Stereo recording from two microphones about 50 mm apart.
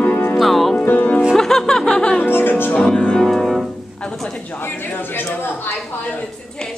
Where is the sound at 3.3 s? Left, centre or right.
Centre.